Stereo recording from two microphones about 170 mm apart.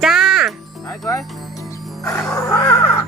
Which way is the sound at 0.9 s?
20° left (ahead or behind).